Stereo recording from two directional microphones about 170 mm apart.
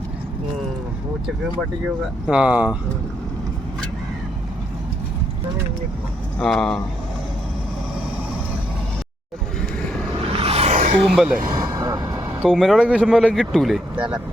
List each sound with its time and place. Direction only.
2.2 s speech: 5° right (ahead or behind)
6.4 s speech: 5° left (ahead or behind)
10.2 s a sound: 35° right (ahead or behind)
11.1 s speech: centre (ahead or behind)
11.5 s vehicle: 20° right (ahead or behind)
12.5 s speech: centre (ahead or behind)